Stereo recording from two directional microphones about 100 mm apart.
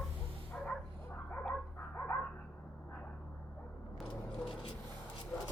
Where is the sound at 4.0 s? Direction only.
10° left (ahead or behind).